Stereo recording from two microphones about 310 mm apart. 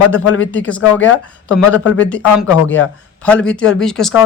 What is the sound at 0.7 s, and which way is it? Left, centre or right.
Speech, centre.